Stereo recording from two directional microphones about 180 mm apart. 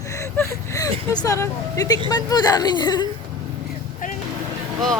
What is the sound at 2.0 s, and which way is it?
Speech, 20° left (ahead or behind).